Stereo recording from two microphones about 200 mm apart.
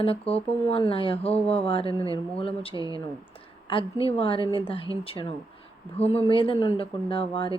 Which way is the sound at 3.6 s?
25° left (ahead or behind).